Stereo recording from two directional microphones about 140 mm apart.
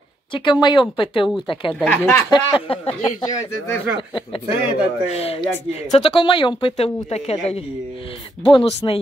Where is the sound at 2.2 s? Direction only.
35° left (ahead or behind).